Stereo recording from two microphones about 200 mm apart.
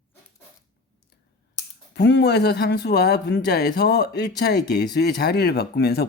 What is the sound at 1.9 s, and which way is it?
Speech, 55° left (ahead or behind).